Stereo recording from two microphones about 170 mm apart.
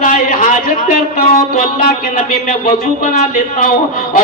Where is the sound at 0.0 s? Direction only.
55° left (ahead or behind).